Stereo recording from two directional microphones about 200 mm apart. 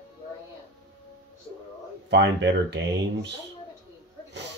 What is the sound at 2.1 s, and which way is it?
Speech, 60° right (ahead or behind).